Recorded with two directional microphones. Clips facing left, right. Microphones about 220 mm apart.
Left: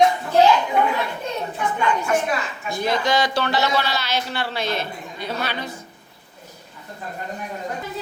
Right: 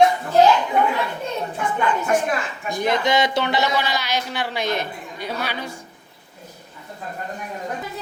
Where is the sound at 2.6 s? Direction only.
15° right (ahead or behind).